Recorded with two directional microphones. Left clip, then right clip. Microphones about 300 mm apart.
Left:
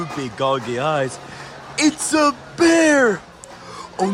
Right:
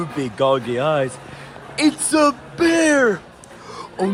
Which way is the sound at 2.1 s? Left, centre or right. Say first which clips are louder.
Right 1 dB; centre.